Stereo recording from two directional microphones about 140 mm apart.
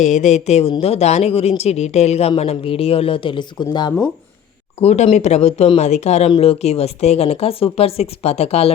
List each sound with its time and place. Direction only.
0.0 s speech: 55° left (ahead or behind); by 3.9 s 30° left (ahead or behind)
4.8 s speech: 45° left (ahead or behind)